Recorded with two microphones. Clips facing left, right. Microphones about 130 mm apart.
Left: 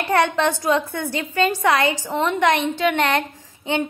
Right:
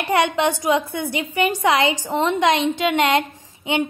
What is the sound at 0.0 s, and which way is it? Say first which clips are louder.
A woman's voice: even; 15° right (ahead or behind).